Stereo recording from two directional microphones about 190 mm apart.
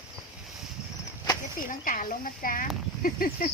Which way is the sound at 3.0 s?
50° left (ahead or behind).